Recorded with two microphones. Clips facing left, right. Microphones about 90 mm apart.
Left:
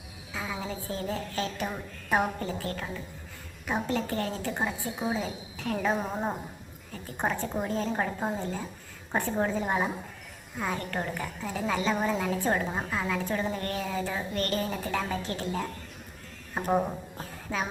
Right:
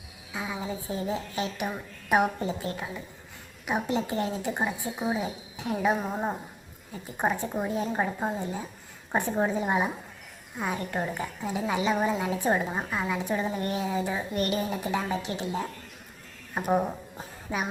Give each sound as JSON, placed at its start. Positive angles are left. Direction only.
{"t": 0.3, "sound": "a woman's voice", "side_deg": -15}